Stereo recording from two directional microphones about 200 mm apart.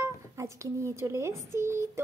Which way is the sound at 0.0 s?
15° right (ahead or behind).